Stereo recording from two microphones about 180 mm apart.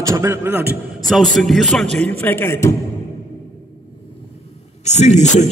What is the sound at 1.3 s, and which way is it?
A man's voice, centre (ahead or behind).